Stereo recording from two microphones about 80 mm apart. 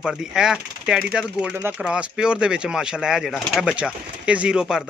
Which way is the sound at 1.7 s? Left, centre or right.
Centre.